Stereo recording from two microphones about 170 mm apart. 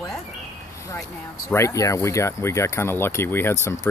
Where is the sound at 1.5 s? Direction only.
15° left (ahead or behind).